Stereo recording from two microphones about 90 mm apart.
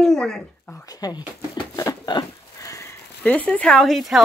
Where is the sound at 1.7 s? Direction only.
45° left (ahead or behind).